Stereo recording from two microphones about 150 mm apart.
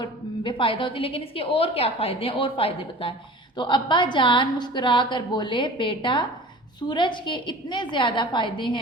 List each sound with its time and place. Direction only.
0.0 s a woman's voice: 35° left (ahead or behind)